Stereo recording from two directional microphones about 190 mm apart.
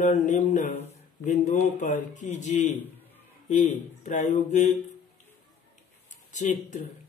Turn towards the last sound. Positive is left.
turn(degrees=40)  # may be behind; listen again after turning